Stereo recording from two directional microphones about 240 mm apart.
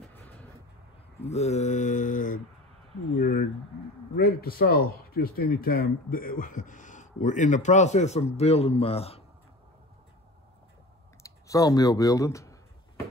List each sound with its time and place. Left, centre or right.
0.1 s vehicle: centre
1.2 s mantra: left
3.2 s a sound: left
4.2 s speech: left
11.2 s speech: centre